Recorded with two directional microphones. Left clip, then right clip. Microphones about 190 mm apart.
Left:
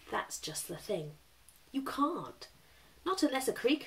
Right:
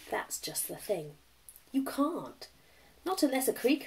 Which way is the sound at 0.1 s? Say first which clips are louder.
Right 1 dB; 15° left (ahead or behind).